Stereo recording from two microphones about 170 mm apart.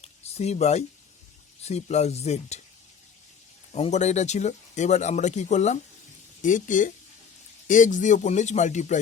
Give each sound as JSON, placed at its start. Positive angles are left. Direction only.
{"t": 0.0, "sound": "a sound", "side_deg": 40}
{"t": 1.6, "sound": "speech", "side_deg": 40}
{"t": 3.7, "sound": "speech", "side_deg": 40}